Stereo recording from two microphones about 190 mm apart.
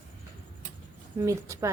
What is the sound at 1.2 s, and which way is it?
Speech, 15° right (ahead or behind).